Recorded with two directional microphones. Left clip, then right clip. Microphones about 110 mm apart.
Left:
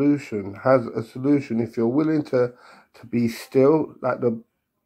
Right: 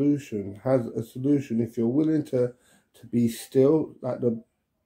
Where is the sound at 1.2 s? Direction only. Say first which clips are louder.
Left 3 dB; 20° right (ahead or behind).